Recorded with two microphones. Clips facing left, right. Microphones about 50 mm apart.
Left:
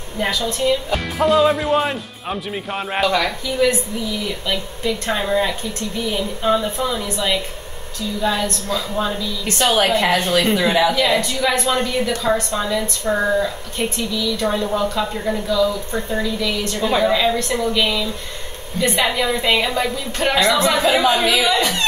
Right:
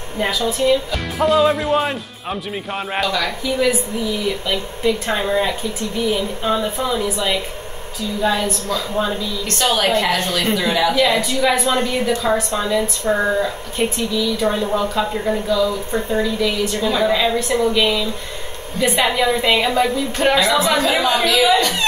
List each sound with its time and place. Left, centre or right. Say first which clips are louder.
0.6 s a woman's voice: right 1 dB; centre
3.1 s speech: left 2 dB; left
3.6 s a woman's voice: left 2 dB; centre
8.2 s a woman's voice: right 2 dB; centre
9.5 s a woman's voice: left 1 dB; centre
10.9 s a woman's voice: right 1 dB; centre